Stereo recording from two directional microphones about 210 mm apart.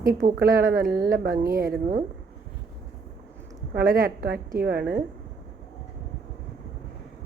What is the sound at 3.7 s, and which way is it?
Speech, 40° right (ahead or behind).